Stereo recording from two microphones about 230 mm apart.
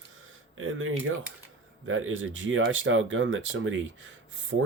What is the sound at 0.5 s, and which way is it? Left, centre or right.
Speech, right.